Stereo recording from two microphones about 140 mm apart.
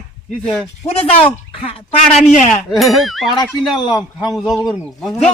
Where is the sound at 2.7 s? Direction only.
Centre (ahead or behind).